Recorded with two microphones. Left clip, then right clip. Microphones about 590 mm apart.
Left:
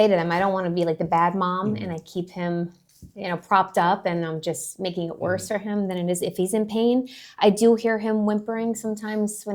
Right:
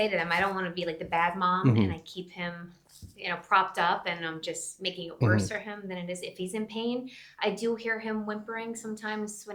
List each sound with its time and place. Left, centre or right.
0.0 s speech: left